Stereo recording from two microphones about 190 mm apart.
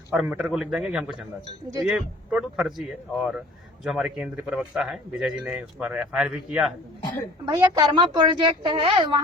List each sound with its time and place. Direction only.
0.1 s speech: 5° right (ahead or behind)
7.4 s a woman's voice: 20° right (ahead or behind)